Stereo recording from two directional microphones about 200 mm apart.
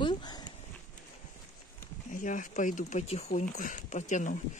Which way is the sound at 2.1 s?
40° left (ahead or behind).